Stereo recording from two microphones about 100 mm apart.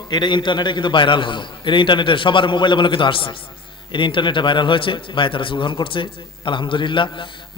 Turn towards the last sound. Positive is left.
turn(degrees=55)  # may be behind; listen again after turning